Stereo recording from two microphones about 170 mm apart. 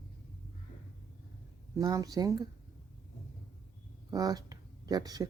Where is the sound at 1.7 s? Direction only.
20° right (ahead or behind).